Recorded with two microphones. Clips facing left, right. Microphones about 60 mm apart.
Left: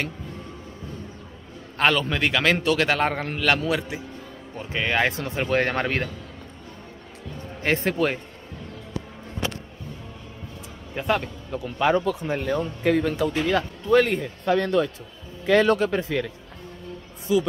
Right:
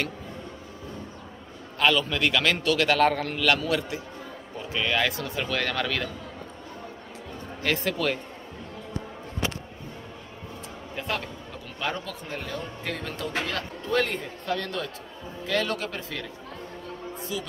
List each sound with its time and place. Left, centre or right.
1.8 s a man's voice: left
4.6 s speech: left
7.6 s speech: left
11.0 s a man's voice: centre
14.4 s a man's voice: left